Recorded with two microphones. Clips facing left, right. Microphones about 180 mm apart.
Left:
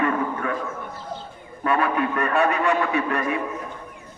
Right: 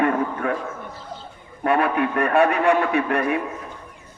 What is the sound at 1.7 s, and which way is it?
A man's voice, 55° right (ahead or behind).